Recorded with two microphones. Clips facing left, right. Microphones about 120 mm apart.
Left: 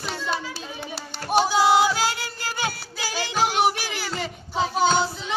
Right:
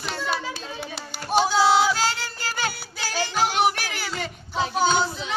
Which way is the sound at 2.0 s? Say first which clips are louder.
Even; 10° left (ahead or behind).